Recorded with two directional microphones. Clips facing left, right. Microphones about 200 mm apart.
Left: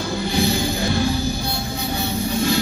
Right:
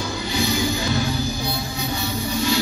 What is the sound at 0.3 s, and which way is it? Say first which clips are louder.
Music: left 3 dB; 55° left (ahead or behind).